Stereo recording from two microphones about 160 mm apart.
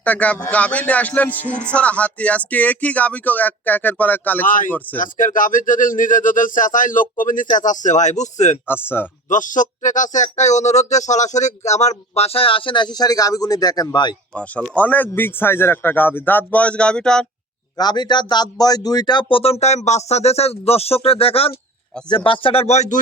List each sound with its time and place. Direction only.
0.0 s a man's voice: 10° left (ahead or behind)
4.4 s speech: 55° left (ahead or behind)
8.6 s a man's voice: 15° left (ahead or behind)
9.3 s speech: 55° left (ahead or behind); by 14.2 s 25° left (ahead or behind)
14.3 s a man's voice: 10° left (ahead or behind)
17.7 s speech: 25° left (ahead or behind); by 23.0 s 45° left (ahead or behind)